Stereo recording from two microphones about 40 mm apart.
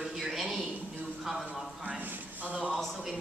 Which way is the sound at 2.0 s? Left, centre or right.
Right.